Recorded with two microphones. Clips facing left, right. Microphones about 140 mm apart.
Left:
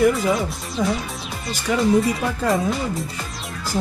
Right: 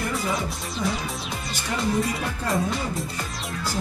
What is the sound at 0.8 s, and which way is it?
Speech, 90° left.